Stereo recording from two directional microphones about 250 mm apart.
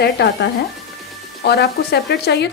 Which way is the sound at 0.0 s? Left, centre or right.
Left.